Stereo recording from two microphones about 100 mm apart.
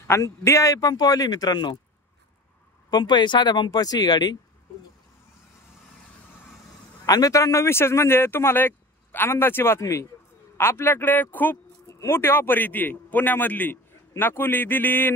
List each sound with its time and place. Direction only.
0.0 s a man's voice: 25° left (ahead or behind); by 1.8 s 45° left (ahead or behind)
2.9 s speech: 50° left (ahead or behind)
7.1 s a man's voice: 35° left (ahead or behind); by 15.1 s 20° left (ahead or behind)